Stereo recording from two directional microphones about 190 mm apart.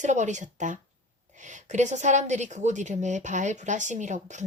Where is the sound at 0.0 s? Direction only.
40° right (ahead or behind).